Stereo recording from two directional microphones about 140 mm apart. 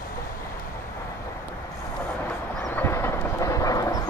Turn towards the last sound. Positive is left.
turn(degrees=25)  # may be behind; listen again after turning